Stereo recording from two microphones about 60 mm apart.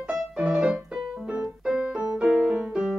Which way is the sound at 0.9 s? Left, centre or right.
Centre.